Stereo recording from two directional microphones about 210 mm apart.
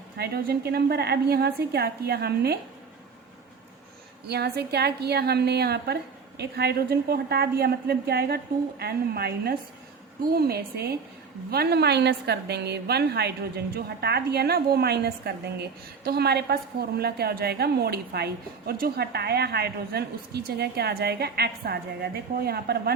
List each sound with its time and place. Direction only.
0.2 s a woman's voice: 50° right (ahead or behind)
4.3 s a woman's voice: 50° right (ahead or behind)